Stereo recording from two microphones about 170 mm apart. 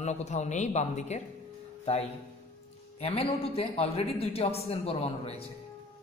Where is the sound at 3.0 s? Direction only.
35° left (ahead or behind).